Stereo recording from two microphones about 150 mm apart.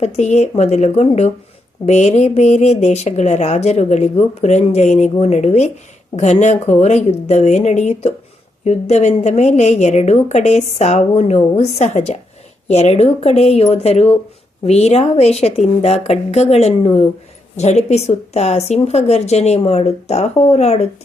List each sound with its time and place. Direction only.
0.0 s speech: 50° left (ahead or behind)